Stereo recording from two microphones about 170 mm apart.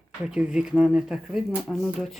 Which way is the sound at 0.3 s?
5° right (ahead or behind).